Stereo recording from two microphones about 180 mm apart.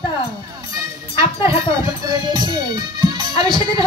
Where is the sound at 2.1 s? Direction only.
25° right (ahead or behind).